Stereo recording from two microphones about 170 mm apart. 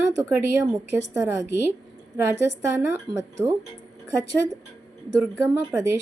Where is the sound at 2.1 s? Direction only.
10° right (ahead or behind).